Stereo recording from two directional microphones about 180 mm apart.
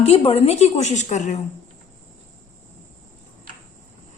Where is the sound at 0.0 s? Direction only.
30° left (ahead or behind).